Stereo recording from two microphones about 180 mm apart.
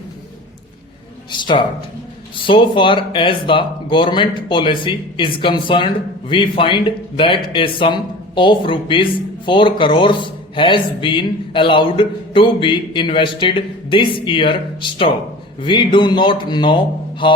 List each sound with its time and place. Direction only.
1.3 s speech: 25° left (ahead or behind)